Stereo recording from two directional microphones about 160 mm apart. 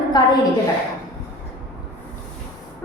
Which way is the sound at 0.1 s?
25° left (ahead or behind).